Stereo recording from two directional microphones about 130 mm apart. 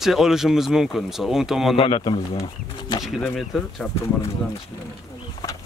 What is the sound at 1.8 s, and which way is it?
Speech, 35° left (ahead or behind).